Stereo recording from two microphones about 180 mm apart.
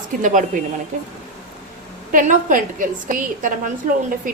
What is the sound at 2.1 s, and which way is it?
A woman's voice, 50° right (ahead or behind).